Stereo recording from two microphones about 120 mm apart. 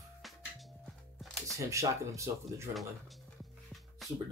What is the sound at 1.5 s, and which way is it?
Speech, 25° right (ahead or behind).